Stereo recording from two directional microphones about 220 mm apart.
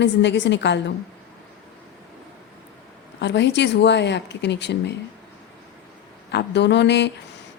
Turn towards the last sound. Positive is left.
turn(degrees=50)  # may be behind; listen again after turning